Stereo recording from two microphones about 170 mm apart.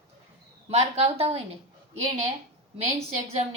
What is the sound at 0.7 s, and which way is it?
Speech, 40° right (ahead or behind).